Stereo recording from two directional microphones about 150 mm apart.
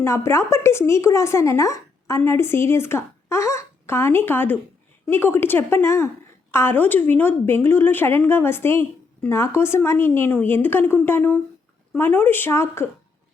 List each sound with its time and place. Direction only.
0.0 s a woman's voice: 15° left (ahead or behind)